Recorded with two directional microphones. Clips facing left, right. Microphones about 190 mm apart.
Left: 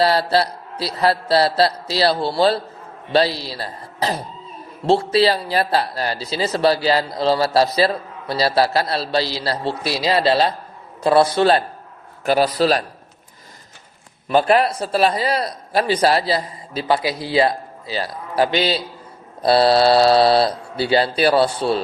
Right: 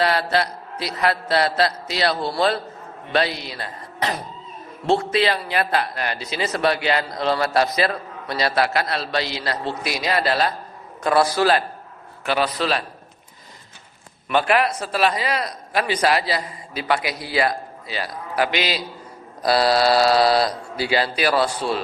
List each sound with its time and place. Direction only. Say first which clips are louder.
0.0 s a man's voice: left 4 dB; 30° left (ahead or behind)
12.2 s a man's voice: left 6 dB; 40° left (ahead or behind)
14.3 s a man's voice: left 4 dB; 35° left (ahead or behind)